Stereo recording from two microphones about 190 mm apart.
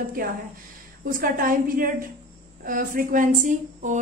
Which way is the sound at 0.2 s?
50° right (ahead or behind).